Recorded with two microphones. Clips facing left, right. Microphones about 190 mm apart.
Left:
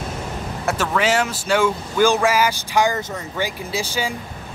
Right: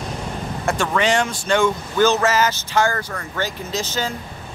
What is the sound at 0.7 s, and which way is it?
Speech, 5° left (ahead or behind).